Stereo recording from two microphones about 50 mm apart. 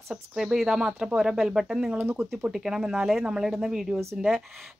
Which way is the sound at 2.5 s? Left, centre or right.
Centre.